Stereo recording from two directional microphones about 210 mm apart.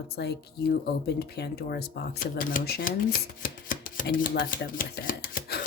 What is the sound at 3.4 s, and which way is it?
Chopping, 40° left (ahead or behind).